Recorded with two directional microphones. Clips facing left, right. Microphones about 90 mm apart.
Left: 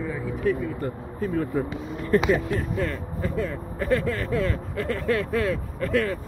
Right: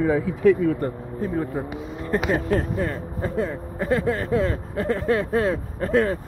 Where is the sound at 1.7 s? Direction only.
25° right (ahead or behind).